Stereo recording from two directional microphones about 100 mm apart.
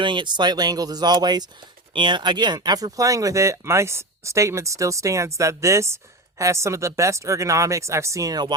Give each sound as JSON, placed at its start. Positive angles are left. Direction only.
{"t": 0.0, "sound": "speech", "side_deg": -55}